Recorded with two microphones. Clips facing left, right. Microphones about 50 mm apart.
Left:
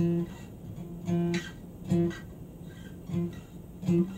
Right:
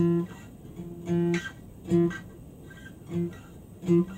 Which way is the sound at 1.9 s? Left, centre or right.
Right.